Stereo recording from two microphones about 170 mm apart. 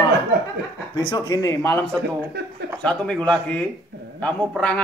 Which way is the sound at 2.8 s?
5° left (ahead or behind).